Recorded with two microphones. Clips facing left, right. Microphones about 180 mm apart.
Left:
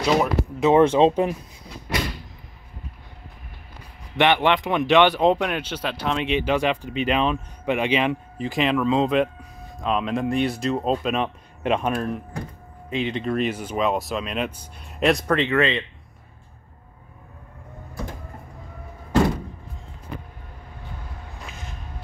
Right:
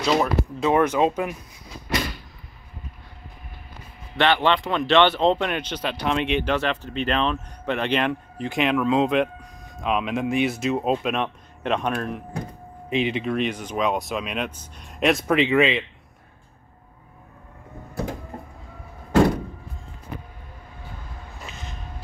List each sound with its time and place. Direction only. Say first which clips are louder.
0.0 s speech: left 1 dB; 15° left (ahead or behind)
4.2 s speech: left 1 dB; 15° left (ahead or behind)
12.9 s speech: right 2 dB; 15° right (ahead or behind)
13.2 s speech: left 1 dB; centre (ahead or behind)
15.3 s speech: right 2 dB; 15° right (ahead or behind)
21.5 s a sound: right 2 dB; 10° left (ahead or behind)